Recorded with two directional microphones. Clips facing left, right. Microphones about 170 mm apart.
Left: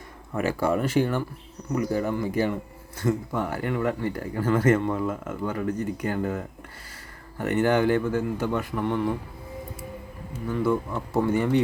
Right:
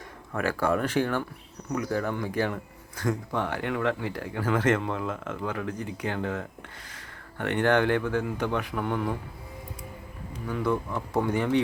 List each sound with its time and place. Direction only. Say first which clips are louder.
0.3 s speech: left 2 dB; 10° left (ahead or behind)
4.5 s speech: left 4 dB; 10° left (ahead or behind)
10.3 s speech: left 3 dB; 5° left (ahead or behind)